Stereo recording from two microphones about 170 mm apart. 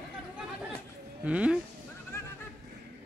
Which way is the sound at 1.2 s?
5° right (ahead or behind).